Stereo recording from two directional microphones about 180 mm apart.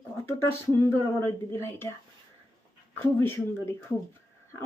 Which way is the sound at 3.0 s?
15° left (ahead or behind).